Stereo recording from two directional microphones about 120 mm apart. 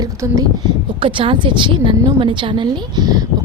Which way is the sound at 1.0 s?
45° right (ahead or behind).